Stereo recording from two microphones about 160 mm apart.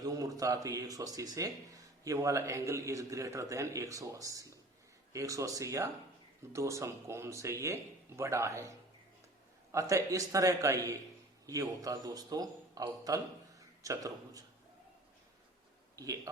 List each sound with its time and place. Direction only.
0.0 s speech: 25° right (ahead or behind)
9.7 s speech: 20° right (ahead or behind)
16.0 s speech: 20° right (ahead or behind)